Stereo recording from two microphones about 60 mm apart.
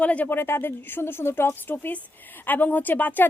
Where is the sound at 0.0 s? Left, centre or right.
Left.